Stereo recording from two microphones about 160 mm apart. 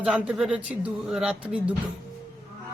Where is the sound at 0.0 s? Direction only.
5° right (ahead or behind).